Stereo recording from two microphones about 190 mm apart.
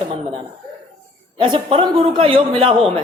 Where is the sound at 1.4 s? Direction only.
30° right (ahead or behind).